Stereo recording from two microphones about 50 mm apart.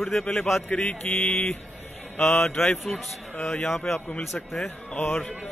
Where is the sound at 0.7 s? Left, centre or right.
Left.